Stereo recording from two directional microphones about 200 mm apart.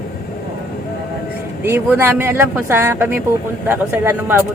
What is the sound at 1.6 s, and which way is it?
Speech, 10° right (ahead or behind).